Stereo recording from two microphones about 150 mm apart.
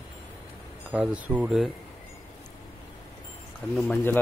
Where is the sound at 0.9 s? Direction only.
10° right (ahead or behind).